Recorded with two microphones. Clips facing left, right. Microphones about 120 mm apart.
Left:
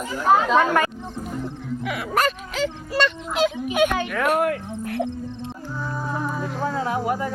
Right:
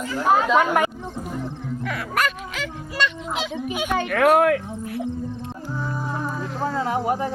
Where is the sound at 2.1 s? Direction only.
35° left (ahead or behind).